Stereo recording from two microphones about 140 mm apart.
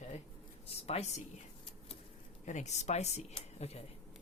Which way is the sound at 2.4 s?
60° left (ahead or behind).